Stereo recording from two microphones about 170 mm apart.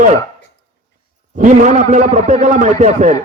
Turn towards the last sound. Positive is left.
turn(degrees=-45)  # may be behind; listen again after turning